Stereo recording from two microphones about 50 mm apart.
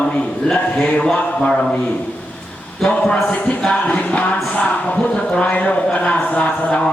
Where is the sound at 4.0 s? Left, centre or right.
Left.